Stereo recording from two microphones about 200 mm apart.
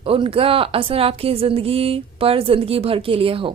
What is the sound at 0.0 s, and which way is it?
A woman's voice, 30° right (ahead or behind).